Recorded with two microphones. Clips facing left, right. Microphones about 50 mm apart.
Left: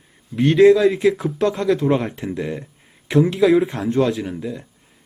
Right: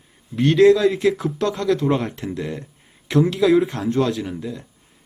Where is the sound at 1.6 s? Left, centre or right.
Centre.